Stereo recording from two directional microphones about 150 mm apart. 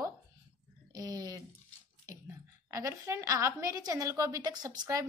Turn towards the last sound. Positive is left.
turn(degrees=-20)  # may be behind; listen again after turning